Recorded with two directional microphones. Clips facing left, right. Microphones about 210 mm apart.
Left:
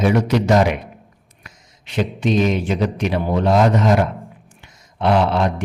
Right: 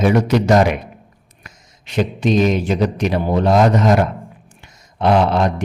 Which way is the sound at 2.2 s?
40° right (ahead or behind).